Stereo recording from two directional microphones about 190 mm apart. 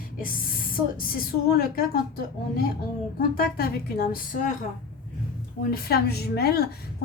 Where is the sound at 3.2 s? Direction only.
50° left (ahead or behind).